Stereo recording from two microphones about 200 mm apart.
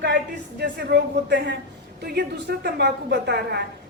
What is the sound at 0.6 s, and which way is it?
A woman's voice, 55° right (ahead or behind).